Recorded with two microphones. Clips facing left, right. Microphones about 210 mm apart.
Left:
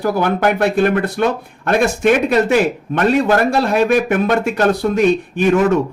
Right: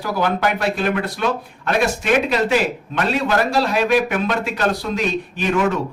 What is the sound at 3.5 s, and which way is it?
Speech, 50° left (ahead or behind).